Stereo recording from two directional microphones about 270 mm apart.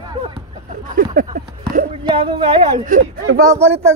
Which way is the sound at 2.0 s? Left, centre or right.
Centre.